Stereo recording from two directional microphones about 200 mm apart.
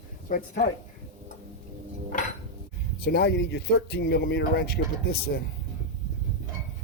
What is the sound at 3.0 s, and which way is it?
Speech, 55° left (ahead or behind).